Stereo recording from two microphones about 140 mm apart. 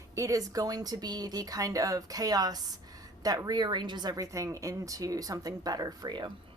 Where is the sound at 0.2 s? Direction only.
25° right (ahead or behind).